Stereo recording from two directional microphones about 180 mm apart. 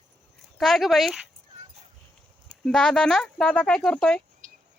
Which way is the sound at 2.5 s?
5° left (ahead or behind).